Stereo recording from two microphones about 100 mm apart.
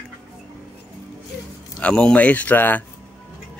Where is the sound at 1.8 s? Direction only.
10° left (ahead or behind).